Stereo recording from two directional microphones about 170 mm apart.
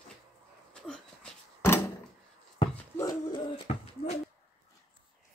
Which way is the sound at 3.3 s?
35° left (ahead or behind).